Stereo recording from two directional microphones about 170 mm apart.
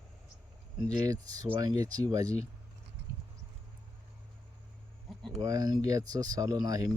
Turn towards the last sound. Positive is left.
turn(degrees=-20)  # may be behind; listen again after turning